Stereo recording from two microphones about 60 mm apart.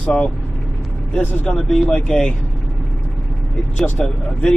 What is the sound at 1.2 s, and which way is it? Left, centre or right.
Speech, left.